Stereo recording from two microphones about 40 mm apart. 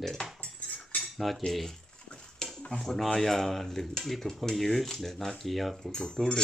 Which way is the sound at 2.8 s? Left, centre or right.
Centre.